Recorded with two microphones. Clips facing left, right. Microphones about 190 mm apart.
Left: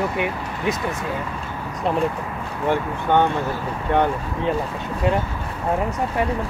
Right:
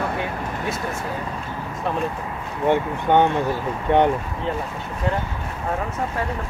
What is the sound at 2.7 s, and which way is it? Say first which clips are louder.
Speech: right 1 dB; 15° right (ahead or behind).